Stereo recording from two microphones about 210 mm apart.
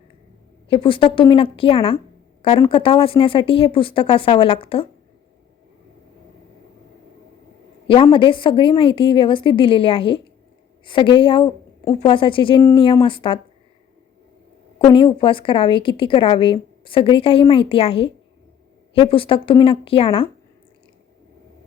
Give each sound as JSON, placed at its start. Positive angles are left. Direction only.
{"t": 0.7, "sound": "a woman's voice", "side_deg": 25}
{"t": 8.0, "sound": "a woman's voice", "side_deg": 25}
{"t": 14.8, "sound": "a woman's voice", "side_deg": 25}